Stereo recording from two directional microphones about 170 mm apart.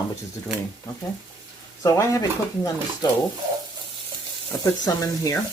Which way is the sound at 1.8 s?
20° left (ahead or behind).